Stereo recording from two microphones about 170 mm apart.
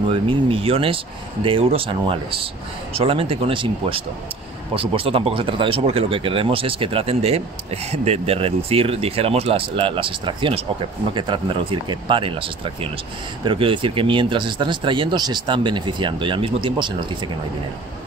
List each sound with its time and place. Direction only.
0.1 s speech: 30° right (ahead or behind)